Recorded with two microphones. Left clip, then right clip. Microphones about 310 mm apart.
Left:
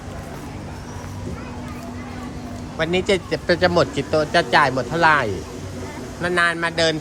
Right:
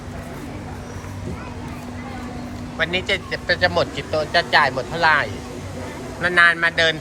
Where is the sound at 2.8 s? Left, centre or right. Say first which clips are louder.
Left 1 dB; centre.